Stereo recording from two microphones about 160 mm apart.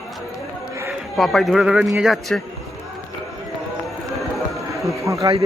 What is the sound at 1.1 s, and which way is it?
Speech, centre (ahead or behind).